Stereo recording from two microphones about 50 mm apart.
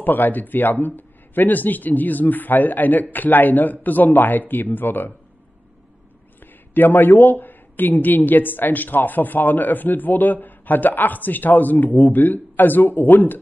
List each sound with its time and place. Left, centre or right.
0.0 s a woman's voice: left
6.7 s a woman's voice: left